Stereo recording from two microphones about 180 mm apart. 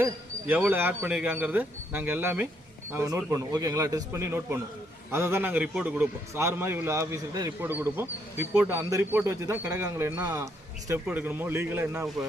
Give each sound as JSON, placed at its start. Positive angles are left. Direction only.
{"t": 0.0, "sound": "bird", "side_deg": -10}
{"t": 0.7, "sound": "a man's voice", "side_deg": -10}